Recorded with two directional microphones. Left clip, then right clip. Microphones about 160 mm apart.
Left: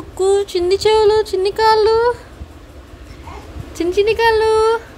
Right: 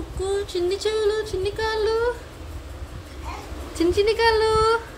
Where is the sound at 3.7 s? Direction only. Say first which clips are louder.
Left 5 dB; 20° left (ahead or behind).